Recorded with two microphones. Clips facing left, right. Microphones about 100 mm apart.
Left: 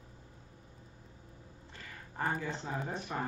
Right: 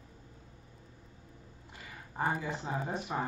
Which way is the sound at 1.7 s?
15° right (ahead or behind).